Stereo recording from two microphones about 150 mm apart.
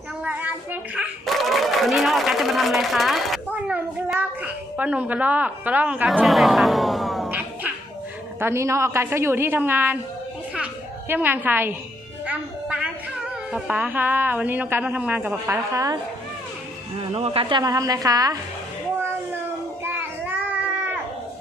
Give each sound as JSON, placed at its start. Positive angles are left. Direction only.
{"t": 0.3, "sound": "a sound", "side_deg": -10}
{"t": 1.2, "sound": "a woman's voice", "side_deg": 0}
{"t": 7.3, "sound": "dog", "side_deg": -10}
{"t": 8.4, "sound": "a woman's voice", "side_deg": -15}
{"t": 11.1, "sound": "a woman's voice", "side_deg": -15}
{"t": 12.2, "sound": "music", "side_deg": -5}
{"t": 13.5, "sound": "a woman's voice", "side_deg": -10}
{"t": 15.7, "sound": "a woman's voice", "side_deg": -25}
{"t": 17.2, "sound": "speech", "side_deg": -40}
{"t": 17.6, "sound": "a woman's voice", "side_deg": -25}
{"t": 19.8, "sound": "children playing", "side_deg": -15}